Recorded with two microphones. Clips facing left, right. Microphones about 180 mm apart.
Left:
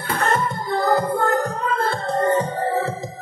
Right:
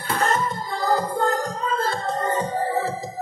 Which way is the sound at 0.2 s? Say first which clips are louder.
Left 2 dB; 60° left (ahead or behind).